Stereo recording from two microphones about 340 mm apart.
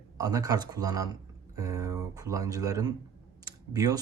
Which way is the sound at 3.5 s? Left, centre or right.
Centre.